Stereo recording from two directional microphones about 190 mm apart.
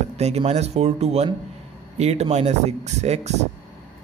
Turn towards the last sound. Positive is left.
turn(degrees=-35)  # may be behind; listen again after turning